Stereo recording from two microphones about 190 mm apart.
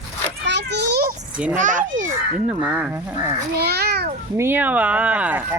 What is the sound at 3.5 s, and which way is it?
Speech, 55° right (ahead or behind).